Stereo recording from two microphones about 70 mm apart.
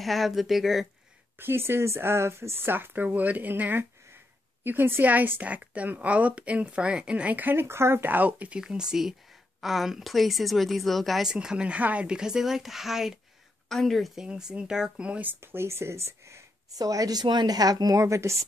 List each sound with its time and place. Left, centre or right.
0.0 s a woman's voice: centre
1.4 s a woman's voice: right; by 11.2 s centre
11.2 s a woman's voice: centre
14.2 s a woman's voice: centre
15.4 s speech: right
16.7 s a woman's voice: right
18.0 s speech: right